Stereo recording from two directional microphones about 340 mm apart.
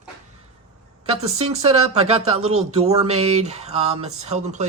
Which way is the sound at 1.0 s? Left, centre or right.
Centre.